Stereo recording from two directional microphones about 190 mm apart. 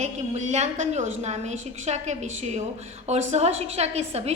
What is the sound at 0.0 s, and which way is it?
A woman's voice, 35° right (ahead or behind).